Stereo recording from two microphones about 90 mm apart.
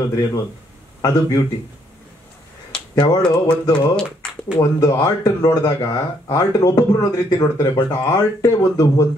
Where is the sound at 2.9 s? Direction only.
45° left (ahead or behind).